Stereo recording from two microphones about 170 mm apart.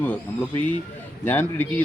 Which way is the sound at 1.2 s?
10° left (ahead or behind).